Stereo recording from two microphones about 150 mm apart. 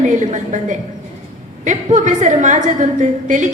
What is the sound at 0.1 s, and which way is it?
A woman's voice, 55° right (ahead or behind).